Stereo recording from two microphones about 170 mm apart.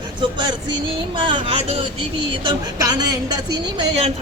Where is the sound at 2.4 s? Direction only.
20° right (ahead or behind).